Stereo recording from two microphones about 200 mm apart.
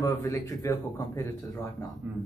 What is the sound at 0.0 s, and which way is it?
A man's voice, 15° left (ahead or behind).